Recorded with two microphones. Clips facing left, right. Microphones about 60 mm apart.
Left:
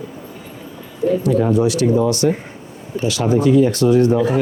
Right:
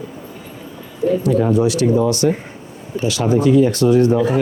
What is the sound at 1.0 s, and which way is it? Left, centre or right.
Speech, right.